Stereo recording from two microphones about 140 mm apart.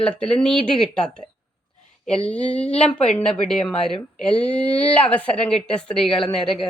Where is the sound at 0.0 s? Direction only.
5° left (ahead or behind).